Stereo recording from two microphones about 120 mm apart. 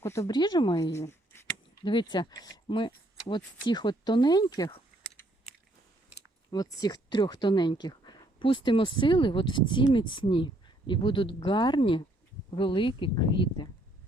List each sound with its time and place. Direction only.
0.0 s speech: 25° left (ahead or behind)
0.3 s speech: 35° left (ahead or behind)
0.8 s speech: 25° left (ahead or behind)
1.8 s speech: 40° left (ahead or behind)
6.5 s speech: 30° left (ahead or behind)